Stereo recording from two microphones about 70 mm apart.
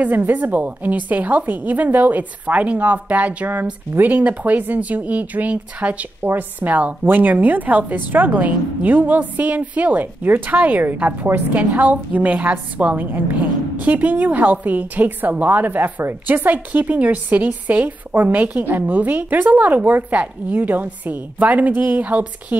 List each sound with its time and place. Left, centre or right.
0.0 s speech: right